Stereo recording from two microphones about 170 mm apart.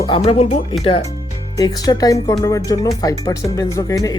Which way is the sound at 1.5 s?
25° left (ahead or behind).